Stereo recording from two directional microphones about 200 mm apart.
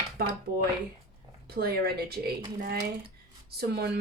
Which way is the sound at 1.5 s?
50° right (ahead or behind).